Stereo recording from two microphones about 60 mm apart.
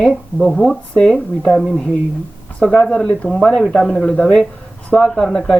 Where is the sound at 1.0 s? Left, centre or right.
Centre.